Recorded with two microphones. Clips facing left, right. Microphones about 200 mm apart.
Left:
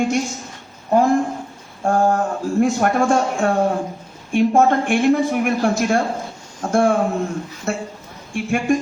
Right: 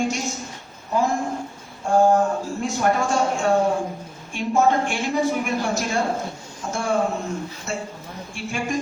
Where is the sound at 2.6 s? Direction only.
55° left (ahead or behind).